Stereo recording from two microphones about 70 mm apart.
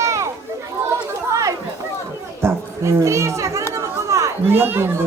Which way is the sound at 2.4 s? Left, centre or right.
Right.